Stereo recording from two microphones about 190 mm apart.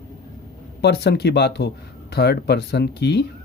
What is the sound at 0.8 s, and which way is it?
Speech, 60° left (ahead or behind).